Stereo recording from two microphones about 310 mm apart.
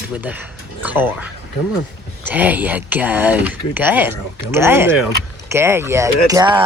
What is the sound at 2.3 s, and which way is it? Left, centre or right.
Speech, centre.